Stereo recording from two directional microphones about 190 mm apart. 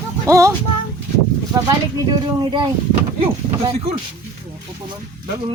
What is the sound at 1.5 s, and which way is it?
Speech, 20° right (ahead or behind).